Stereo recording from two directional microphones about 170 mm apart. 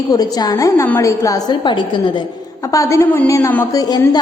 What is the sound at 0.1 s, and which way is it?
A woman's voice, 20° left (ahead or behind).